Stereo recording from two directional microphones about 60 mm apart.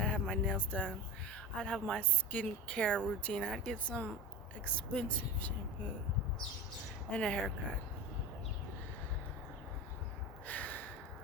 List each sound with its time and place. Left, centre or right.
0.0 s speech: left
7.1 s speech: centre
10.4 s gasp: left